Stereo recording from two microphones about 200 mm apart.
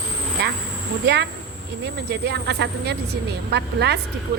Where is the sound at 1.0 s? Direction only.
55° right (ahead or behind).